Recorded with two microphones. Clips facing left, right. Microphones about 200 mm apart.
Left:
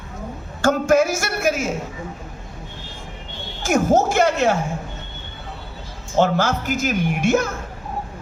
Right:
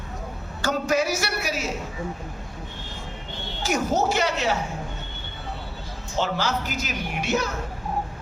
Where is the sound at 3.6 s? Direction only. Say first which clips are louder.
Left 6 dB; 50° left (ahead or behind).